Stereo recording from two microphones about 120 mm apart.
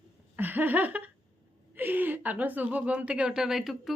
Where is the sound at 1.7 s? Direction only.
15° right (ahead or behind).